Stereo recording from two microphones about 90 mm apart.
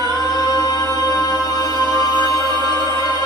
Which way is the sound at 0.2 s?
40° left (ahead or behind).